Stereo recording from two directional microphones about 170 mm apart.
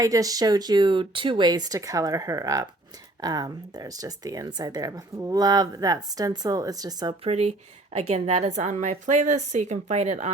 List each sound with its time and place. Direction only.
0.0 s speech: 20° right (ahead or behind)
7.1 s a woman's voice: 40° right (ahead or behind)